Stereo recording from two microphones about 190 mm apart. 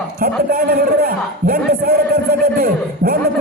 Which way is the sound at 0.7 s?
55° right (ahead or behind).